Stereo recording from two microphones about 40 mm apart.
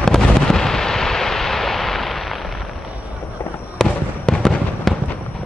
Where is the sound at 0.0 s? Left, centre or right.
Centre.